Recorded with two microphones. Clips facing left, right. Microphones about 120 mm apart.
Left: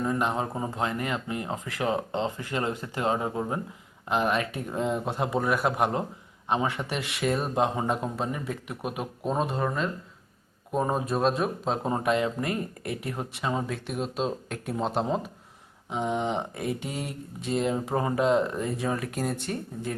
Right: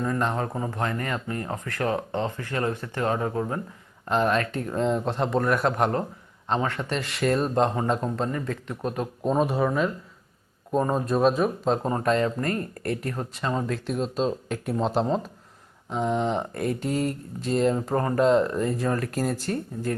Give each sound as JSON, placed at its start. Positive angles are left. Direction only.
{"t": 0.0, "sound": "speech", "side_deg": 15}
{"t": 4.1, "sound": "mantra", "side_deg": 5}
{"t": 6.5, "sound": "speech", "side_deg": 10}
{"t": 10.7, "sound": "mantra", "side_deg": 10}